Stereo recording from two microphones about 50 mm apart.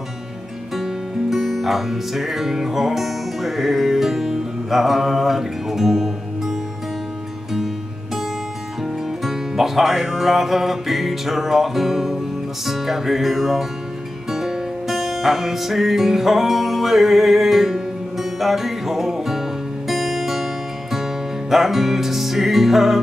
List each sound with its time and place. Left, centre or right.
0.7 s music: centre
8.8 s music: centre
21.5 s music: centre